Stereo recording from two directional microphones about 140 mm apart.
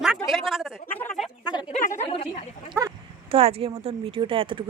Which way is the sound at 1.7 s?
60° left (ahead or behind).